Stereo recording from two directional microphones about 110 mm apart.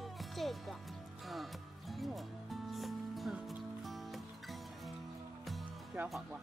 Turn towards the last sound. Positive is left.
turn(degrees=-20)  # may be behind; listen again after turning